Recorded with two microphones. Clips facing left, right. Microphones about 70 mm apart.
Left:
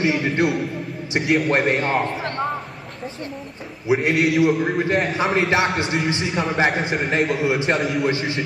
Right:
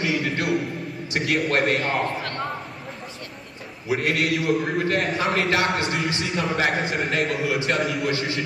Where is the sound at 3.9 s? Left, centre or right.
Centre.